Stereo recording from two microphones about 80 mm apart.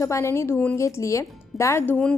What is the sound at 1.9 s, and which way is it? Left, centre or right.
Speech, centre.